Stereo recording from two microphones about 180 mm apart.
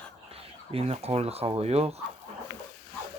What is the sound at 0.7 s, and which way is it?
Speech, 35° right (ahead or behind).